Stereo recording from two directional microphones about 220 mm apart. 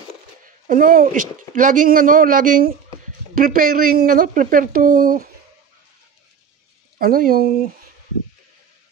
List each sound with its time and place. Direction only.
0.7 s speech: 40° right (ahead or behind)
7.0 s speech: 40° right (ahead or behind)